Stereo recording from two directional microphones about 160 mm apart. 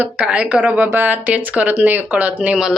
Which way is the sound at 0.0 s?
10° right (ahead or behind).